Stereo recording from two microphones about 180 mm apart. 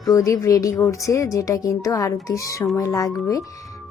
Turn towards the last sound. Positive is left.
turn(degrees=20)  # may be behind; listen again after turning